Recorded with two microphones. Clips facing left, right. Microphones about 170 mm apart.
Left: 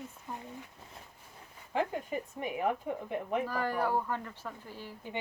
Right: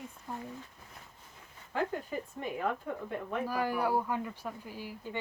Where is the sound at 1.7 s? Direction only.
15° left (ahead or behind).